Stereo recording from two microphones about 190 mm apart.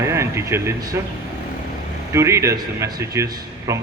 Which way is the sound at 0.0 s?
15° right (ahead or behind).